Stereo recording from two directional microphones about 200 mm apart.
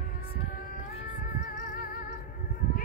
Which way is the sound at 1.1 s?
45° left (ahead or behind).